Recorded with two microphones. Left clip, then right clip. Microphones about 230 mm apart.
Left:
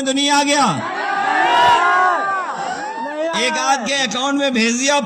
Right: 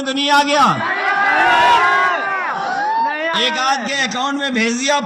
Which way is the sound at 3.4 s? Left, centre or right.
Left.